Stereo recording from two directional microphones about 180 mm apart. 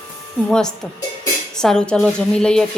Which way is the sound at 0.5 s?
5° left (ahead or behind).